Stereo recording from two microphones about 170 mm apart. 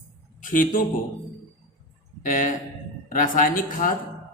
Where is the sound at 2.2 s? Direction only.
50° left (ahead or behind).